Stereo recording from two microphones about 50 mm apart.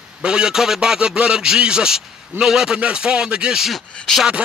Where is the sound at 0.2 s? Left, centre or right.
Centre.